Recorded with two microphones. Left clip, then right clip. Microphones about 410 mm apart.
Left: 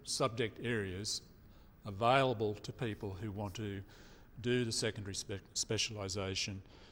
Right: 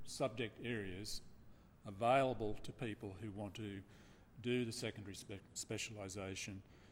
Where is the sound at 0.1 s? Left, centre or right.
Left.